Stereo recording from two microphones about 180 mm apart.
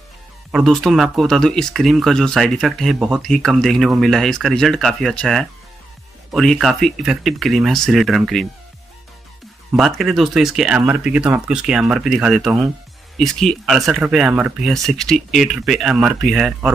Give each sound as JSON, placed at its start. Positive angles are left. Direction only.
{"t": 0.5, "sound": "speech", "side_deg": 0}
{"t": 9.8, "sound": "speech", "side_deg": 0}